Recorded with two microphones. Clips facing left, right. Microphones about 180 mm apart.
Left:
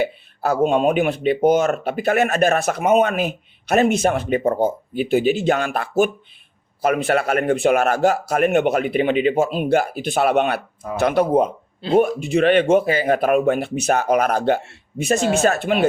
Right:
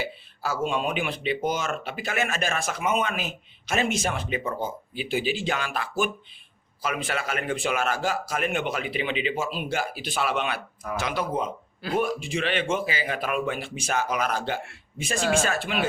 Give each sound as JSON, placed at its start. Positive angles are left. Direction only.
{"t": 0.0, "sound": "speech", "side_deg": 60}
{"t": 1.6, "sound": "speech", "side_deg": 45}